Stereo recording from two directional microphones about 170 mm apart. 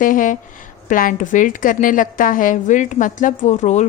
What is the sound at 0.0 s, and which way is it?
A woman's voice, 50° left (ahead or behind).